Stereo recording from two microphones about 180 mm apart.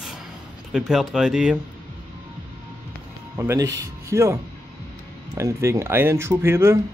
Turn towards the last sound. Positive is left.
turn(degrees=-15)  # may be behind; listen again after turning